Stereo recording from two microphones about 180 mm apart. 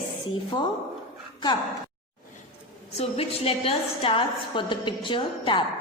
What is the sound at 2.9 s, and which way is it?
A woman's voice, 30° left (ahead or behind).